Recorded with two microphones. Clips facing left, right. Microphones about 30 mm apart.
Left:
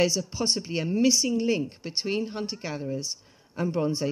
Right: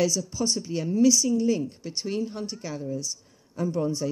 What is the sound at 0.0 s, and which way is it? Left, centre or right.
Speech, left.